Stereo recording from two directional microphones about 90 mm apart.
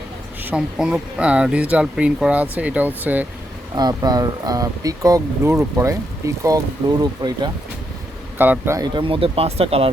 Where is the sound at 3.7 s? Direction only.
50° right (ahead or behind).